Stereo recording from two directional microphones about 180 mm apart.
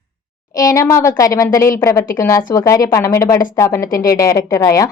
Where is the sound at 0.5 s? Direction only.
20° left (ahead or behind).